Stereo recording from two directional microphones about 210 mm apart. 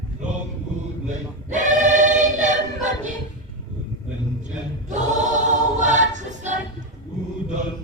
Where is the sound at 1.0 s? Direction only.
35° right (ahead or behind).